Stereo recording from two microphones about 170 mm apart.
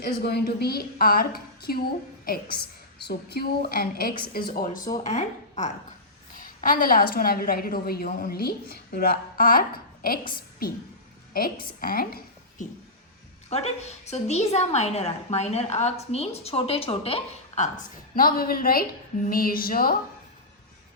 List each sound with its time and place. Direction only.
0.0 s a woman's voice: 70° left (ahead or behind)
3.1 s a woman's voice: 70° left (ahead or behind); by 4.9 s 55° left (ahead or behind)
5.0 s a woman's voice: 45° left (ahead or behind)
13.5 s a woman's voice: 40° left (ahead or behind); by 20.0 s 60° left (ahead or behind)